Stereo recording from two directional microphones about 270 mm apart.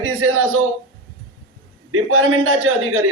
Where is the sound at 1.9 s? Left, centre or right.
Right.